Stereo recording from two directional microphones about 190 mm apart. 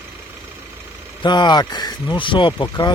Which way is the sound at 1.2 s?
25° left (ahead or behind).